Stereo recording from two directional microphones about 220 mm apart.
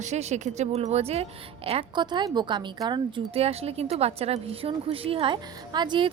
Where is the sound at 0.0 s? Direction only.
30° right (ahead or behind).